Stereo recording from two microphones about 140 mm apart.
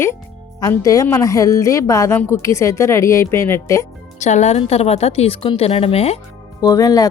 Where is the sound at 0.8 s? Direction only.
25° left (ahead or behind).